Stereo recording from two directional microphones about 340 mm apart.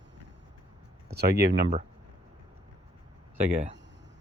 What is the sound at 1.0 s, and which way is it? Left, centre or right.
Speech, right.